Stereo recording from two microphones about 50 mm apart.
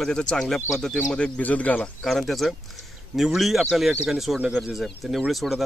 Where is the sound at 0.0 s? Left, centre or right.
Centre.